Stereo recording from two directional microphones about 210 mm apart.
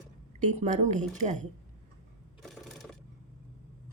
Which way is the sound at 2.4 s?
Centre (ahead or behind).